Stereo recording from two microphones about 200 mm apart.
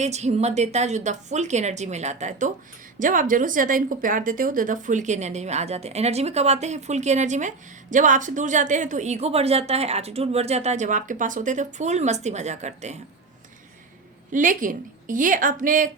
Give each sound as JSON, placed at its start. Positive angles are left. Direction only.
{"t": 0.0, "sound": "a woman's voice", "side_deg": -35}
{"t": 14.3, "sound": "a woman's voice", "side_deg": -40}